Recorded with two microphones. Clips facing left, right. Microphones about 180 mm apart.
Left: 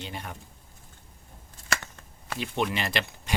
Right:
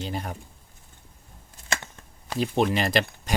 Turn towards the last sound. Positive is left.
turn(degrees=-40)  # may be behind; listen again after turning